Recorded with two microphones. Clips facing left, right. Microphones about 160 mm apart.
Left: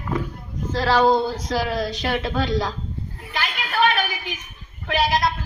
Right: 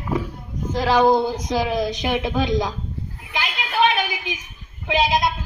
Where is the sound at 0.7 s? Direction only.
15° right (ahead or behind).